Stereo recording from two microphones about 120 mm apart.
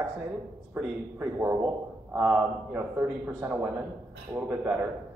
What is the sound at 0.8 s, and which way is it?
Speech, 10° right (ahead or behind).